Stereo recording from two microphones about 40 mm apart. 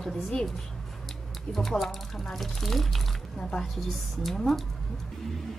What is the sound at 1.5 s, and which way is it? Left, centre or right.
Speech, centre.